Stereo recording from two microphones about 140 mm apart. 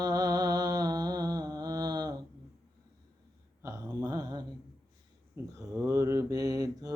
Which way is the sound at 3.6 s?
20° right (ahead or behind).